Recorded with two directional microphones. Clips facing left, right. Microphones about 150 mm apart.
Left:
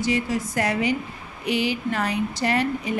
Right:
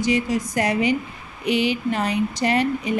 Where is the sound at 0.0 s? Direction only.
15° right (ahead or behind).